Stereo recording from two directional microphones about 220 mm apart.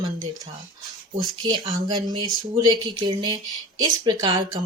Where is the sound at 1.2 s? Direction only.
20° right (ahead or behind).